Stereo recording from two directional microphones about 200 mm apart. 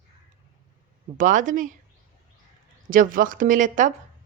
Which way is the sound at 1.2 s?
40° right (ahead or behind).